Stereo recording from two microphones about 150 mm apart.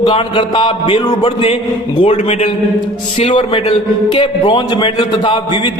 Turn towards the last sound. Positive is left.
turn(degrees=30)  # may be behind; listen again after turning